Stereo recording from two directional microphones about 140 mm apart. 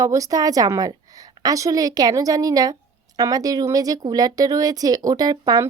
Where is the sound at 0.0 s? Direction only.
25° right (ahead or behind).